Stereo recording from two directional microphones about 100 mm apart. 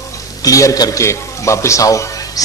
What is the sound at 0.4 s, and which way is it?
A man's voice, 35° left (ahead or behind).